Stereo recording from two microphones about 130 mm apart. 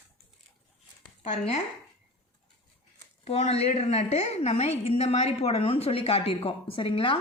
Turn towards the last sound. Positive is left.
turn(degrees=40)  # may be behind; listen again after turning